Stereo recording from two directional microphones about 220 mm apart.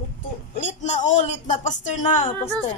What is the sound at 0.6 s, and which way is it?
A woman's voice, 35° left (ahead or behind).